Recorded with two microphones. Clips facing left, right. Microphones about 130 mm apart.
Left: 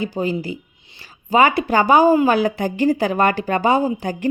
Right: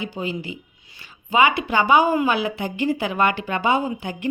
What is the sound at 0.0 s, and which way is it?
A woman's voice, 40° left (ahead or behind).